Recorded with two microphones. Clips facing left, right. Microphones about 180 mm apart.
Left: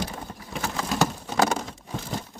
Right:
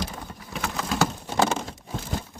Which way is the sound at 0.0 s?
5° left (ahead or behind).